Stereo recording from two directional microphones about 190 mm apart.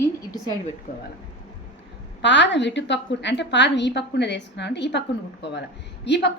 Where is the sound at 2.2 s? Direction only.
70° left (ahead or behind).